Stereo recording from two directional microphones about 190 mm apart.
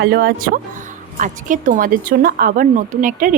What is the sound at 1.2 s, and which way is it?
A woman's voice, 45° right (ahead or behind).